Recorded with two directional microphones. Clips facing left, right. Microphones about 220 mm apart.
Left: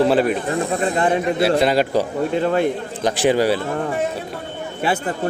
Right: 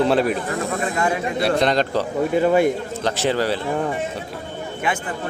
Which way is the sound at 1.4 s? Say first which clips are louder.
Left 1 dB; 5° left (ahead or behind).